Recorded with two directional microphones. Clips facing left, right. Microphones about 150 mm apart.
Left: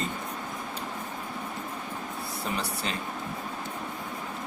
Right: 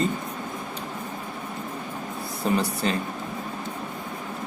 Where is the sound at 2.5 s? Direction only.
40° right (ahead or behind).